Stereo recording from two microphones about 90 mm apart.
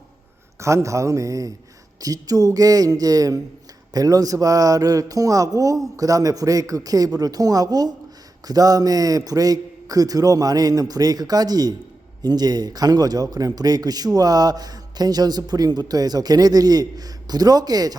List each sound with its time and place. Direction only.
0.6 s a man's voice: 35° right (ahead or behind)